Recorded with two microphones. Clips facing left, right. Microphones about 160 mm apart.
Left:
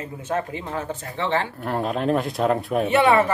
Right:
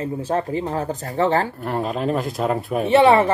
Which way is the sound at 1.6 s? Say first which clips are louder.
Even; centre (ahead or behind).